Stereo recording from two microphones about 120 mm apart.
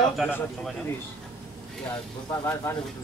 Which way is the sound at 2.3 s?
25° left (ahead or behind).